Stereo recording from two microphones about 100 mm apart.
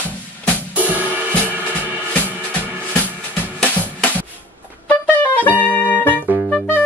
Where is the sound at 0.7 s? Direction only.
15° right (ahead or behind).